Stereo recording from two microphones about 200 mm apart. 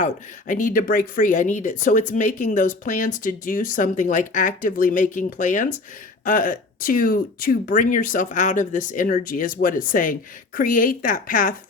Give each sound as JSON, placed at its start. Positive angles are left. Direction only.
{"t": 0.0, "sound": "speech", "side_deg": 40}